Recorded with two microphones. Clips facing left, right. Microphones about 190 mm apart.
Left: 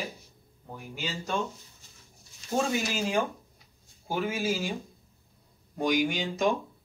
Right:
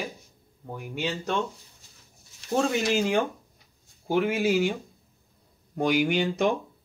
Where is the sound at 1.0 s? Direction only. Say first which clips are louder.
Right 4 dB; 65° right (ahead or behind).